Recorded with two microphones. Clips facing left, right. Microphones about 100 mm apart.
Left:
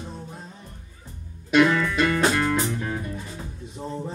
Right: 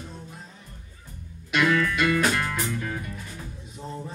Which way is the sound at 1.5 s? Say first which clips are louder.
Left 4 dB; 25° left (ahead or behind).